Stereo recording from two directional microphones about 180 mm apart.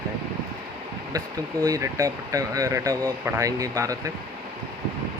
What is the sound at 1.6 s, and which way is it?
Speech, 20° right (ahead or behind).